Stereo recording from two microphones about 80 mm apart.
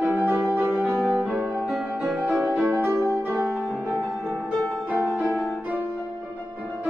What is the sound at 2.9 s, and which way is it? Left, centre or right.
Music, right.